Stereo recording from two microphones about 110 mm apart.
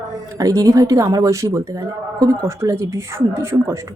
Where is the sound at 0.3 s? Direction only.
30° right (ahead or behind).